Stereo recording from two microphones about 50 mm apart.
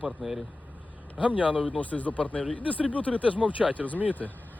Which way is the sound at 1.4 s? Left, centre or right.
Right.